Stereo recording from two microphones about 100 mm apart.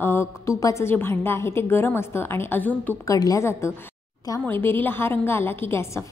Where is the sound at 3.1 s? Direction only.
35° left (ahead or behind).